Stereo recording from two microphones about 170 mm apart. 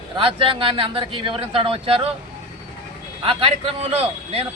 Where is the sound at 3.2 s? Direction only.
35° right (ahead or behind).